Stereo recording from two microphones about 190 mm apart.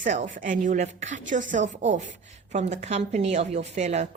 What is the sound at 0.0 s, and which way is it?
Speech, 40° right (ahead or behind).